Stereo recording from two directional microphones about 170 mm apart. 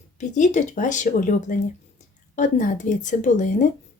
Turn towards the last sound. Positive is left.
turn(degrees=45)  # may be behind; listen again after turning